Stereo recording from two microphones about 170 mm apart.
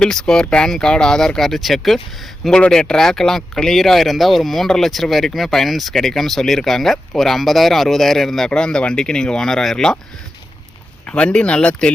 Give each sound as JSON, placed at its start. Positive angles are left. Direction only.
{"t": 0.0, "sound": "speech", "side_deg": 5}
{"t": 11.0, "sound": "speech", "side_deg": 5}